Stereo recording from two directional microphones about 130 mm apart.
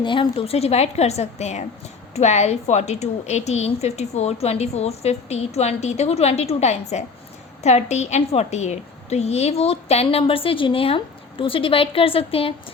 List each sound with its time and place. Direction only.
0.0 s a woman's voice: 40° left (ahead or behind)